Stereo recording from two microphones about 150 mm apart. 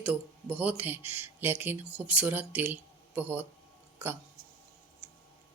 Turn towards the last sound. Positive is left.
turn(degrees=-15)  # may be behind; listen again after turning